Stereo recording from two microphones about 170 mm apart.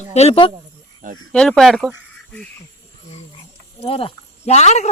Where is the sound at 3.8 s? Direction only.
35° left (ahead or behind).